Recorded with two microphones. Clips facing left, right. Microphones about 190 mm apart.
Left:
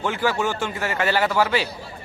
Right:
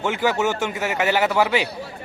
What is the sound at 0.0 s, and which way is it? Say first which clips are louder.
Speech: right 2 dB; 20° right (ahead or behind).